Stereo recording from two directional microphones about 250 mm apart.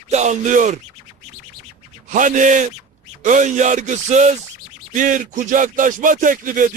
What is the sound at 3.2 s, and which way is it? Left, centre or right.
Music, right.